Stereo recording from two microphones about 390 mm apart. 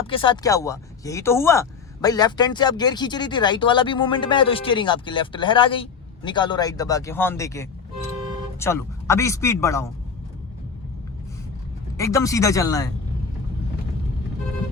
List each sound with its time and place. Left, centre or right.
0.1 s speech: centre
11.9 s speech: centre